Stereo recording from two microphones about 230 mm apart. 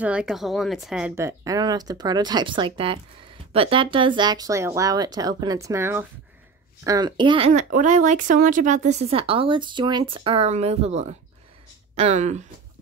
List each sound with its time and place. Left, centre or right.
0.0 s speech: centre; by 12.4 s right